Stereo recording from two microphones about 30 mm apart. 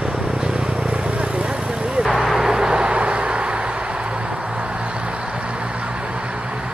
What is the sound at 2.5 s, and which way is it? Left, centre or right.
Vehicle, right.